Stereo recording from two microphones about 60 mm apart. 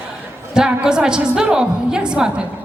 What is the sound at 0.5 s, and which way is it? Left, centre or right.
A woman's voice, centre.